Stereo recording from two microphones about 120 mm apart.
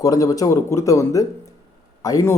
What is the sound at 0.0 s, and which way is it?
Speech, 30° left (ahead or behind).